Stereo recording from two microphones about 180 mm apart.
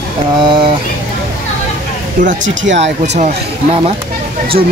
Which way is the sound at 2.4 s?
90° right.